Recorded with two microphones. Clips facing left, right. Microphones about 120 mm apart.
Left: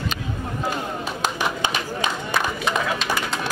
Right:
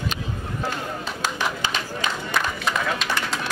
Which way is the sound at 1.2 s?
20° left (ahead or behind).